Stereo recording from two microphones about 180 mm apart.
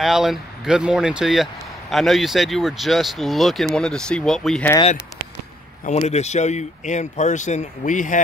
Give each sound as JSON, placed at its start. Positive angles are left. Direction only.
{"t": 0.0, "sound": "speech", "side_deg": 0}
{"t": 5.9, "sound": "speech", "side_deg": 40}